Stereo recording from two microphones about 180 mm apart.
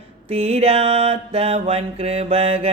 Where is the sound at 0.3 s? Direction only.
35° right (ahead or behind).